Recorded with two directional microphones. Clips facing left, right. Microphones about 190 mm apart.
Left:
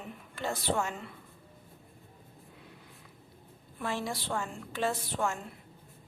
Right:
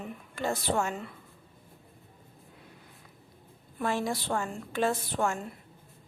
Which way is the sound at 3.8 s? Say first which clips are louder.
Right 4 dB; 50° right (ahead or behind).